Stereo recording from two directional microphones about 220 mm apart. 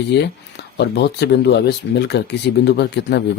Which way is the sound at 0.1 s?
50° left (ahead or behind).